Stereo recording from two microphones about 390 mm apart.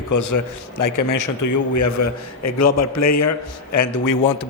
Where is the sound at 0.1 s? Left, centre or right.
Left.